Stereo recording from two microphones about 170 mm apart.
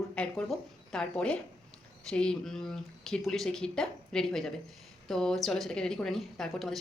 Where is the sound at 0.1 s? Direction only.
5° left (ahead or behind).